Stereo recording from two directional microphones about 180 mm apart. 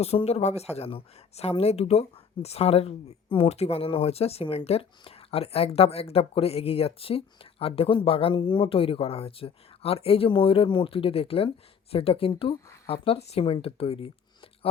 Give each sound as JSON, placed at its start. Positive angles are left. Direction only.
{"t": 0.0, "sound": "speech", "side_deg": 35}